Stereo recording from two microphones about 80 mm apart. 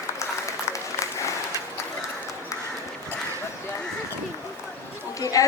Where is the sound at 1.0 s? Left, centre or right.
Left.